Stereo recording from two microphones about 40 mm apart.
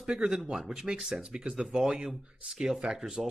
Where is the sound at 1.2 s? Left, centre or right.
Right.